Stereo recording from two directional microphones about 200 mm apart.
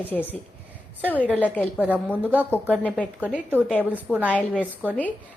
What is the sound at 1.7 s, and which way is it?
A woman's voice, 5° right (ahead or behind).